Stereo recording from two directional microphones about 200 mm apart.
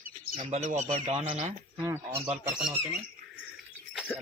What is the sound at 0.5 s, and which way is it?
Speech, 35° right (ahead or behind).